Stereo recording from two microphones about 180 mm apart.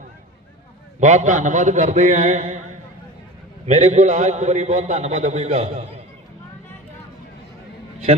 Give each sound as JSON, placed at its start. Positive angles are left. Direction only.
{"t": 0.9, "sound": "a man's voice", "side_deg": -40}
{"t": 3.9, "sound": "a man's voice", "side_deg": -40}